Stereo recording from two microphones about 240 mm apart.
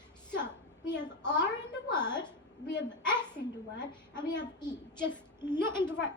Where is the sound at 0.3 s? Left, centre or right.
Centre.